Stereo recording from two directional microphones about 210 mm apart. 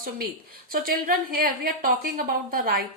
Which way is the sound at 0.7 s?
45° right (ahead or behind).